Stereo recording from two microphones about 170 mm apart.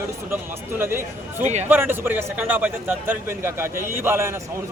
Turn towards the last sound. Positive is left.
turn(degrees=-15)  # may be behind; listen again after turning